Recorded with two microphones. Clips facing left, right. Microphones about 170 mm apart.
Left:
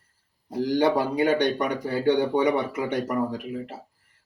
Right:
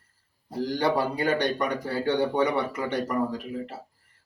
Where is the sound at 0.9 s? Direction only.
15° left (ahead or behind).